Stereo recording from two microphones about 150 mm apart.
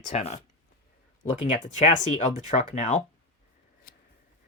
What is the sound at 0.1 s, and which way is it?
Speech, 50° left (ahead or behind).